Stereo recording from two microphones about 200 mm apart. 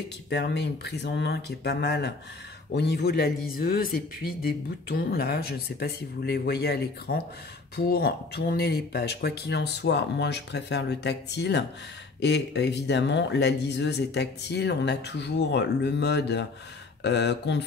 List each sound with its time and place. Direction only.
0.3 s speech: 55° left (ahead or behind)